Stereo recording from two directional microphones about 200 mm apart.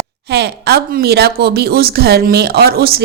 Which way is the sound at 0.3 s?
50° right (ahead or behind).